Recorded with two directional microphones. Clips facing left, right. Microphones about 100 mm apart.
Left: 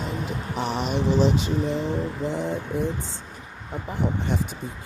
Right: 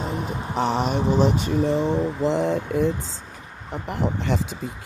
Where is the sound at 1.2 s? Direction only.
50° right (ahead or behind).